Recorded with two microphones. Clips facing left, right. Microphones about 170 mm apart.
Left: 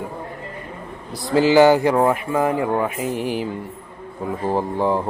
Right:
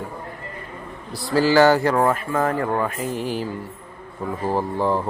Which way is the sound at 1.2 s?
20° left (ahead or behind).